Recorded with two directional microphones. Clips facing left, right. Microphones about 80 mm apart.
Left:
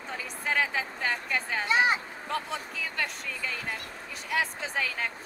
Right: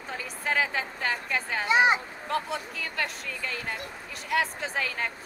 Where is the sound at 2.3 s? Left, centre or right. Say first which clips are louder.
Right 3 dB; centre.